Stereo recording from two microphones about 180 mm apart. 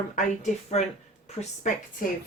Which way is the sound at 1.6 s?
45° left (ahead or behind).